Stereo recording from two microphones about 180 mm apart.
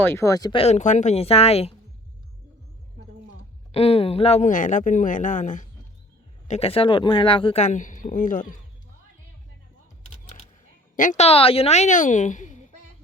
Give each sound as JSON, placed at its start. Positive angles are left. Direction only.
{"t": 0.0, "sound": "speech", "side_deg": 15}
{"t": 0.6, "sound": "speech", "side_deg": 40}
{"t": 3.7, "sound": "speech", "side_deg": 35}
{"t": 6.5, "sound": "speech", "side_deg": 35}
{"t": 10.9, "sound": "speech", "side_deg": 45}